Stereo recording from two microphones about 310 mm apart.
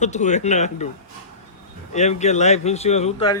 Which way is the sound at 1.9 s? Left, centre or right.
Left.